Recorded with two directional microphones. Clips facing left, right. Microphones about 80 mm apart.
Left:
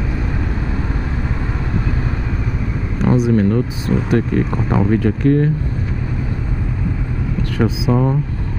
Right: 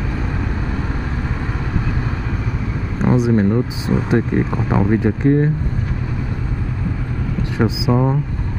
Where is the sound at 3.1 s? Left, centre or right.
Right.